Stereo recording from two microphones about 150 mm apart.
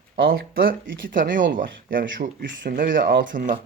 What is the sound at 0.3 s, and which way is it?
Speech, 75° right (ahead or behind).